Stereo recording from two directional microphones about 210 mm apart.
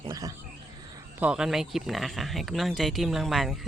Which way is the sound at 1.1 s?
5° right (ahead or behind).